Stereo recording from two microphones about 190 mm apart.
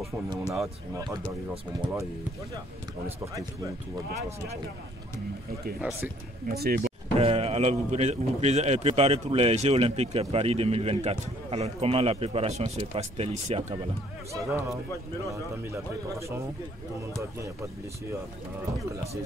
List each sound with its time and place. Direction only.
0.4 s speech: 5° right (ahead or behind)
0.9 s speech: 20° right (ahead or behind)
5.8 s speech: 10° right (ahead or behind)
6.4 s speech: 50° right (ahead or behind)
7.2 s speech: 30° right (ahead or behind)
14.3 s speech: 15° right (ahead or behind)